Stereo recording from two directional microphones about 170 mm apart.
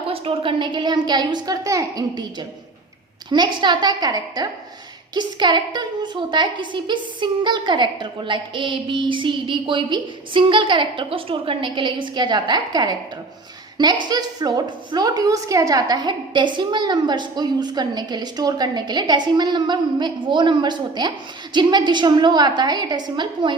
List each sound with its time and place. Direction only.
0.1 s a woman's voice: 30° right (ahead or behind)
3.2 s a woman's voice: 25° right (ahead or behind)